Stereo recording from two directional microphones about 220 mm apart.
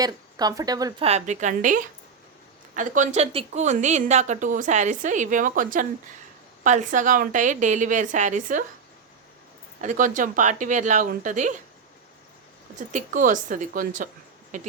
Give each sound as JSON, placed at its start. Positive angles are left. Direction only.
{"t": 0.0, "sound": "speech", "side_deg": -15}
{"t": 1.0, "sound": "a woman's voice", "side_deg": -30}
{"t": 9.8, "sound": "a woman's voice", "side_deg": -35}
{"t": 12.9, "sound": "a woman's voice", "side_deg": -35}